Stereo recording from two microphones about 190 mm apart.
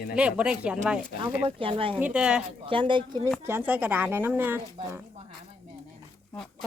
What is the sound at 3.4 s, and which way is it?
Speech, 10° right (ahead or behind).